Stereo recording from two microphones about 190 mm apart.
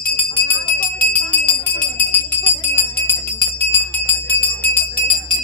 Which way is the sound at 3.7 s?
10° left (ahead or behind).